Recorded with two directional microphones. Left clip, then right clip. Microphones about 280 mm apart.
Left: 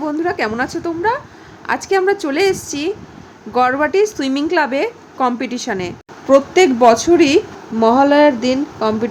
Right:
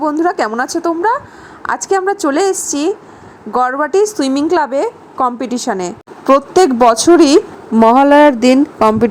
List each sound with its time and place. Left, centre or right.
0.2 s a woman's voice: centre
3.7 s speech: centre
3.9 s a woman's voice: centre